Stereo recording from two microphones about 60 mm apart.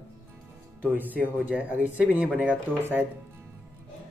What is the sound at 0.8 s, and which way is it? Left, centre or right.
Speech, right.